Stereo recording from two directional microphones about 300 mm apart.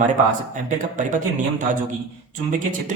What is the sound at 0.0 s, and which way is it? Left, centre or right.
A man's voice, right.